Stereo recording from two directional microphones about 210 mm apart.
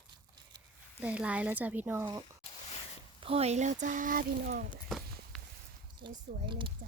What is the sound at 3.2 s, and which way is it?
Speech, 30° right (ahead or behind).